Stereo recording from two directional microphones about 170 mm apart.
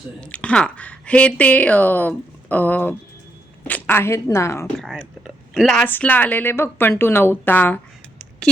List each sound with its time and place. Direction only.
0.2 s speech: 10° left (ahead or behind)
4.8 s speech: centre (ahead or behind)